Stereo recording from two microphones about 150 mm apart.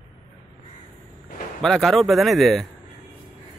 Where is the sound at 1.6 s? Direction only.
Centre (ahead or behind).